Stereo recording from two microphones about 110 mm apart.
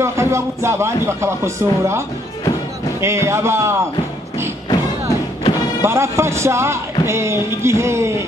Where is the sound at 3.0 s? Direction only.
25° right (ahead or behind).